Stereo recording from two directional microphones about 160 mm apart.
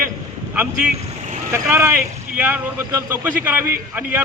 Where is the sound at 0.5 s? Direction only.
10° right (ahead or behind).